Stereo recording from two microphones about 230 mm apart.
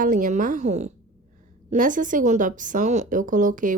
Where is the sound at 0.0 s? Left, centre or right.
Right.